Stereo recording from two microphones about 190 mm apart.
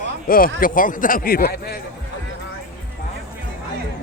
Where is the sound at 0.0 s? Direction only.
50° left (ahead or behind).